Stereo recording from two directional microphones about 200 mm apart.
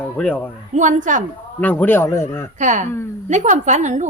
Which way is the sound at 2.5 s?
40° right (ahead or behind).